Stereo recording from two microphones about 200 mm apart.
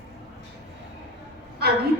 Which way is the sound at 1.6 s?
50° right (ahead or behind).